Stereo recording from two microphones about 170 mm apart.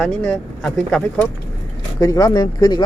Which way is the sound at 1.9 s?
20° left (ahead or behind).